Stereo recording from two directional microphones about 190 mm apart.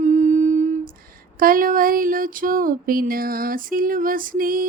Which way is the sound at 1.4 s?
45° right (ahead or behind).